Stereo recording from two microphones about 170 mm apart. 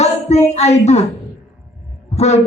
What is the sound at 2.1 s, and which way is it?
Speech, 40° left (ahead or behind).